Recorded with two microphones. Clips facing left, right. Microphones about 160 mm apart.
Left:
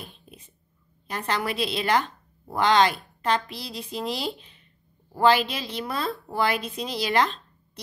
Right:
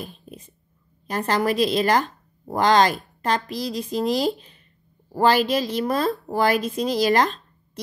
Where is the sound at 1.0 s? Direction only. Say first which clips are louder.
Right 6 dB; 40° right (ahead or behind).